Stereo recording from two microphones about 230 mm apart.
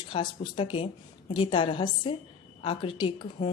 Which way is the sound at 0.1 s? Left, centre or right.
Left.